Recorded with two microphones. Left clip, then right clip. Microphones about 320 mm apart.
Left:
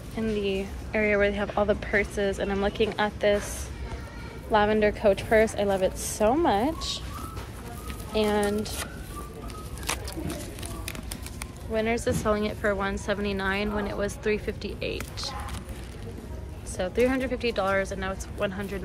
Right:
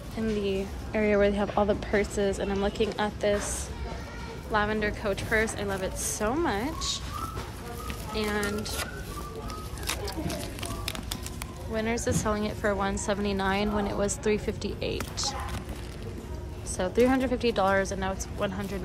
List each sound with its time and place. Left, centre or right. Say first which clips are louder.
0.2 s a woman's voice: left 1 dB; centre
8.1 s a woman's voice: left 5 dB; centre
9.8 s a sound: even; centre
11.7 s a woman's voice: left 3 dB; centre
16.7 s a woman's voice: right 1 dB; centre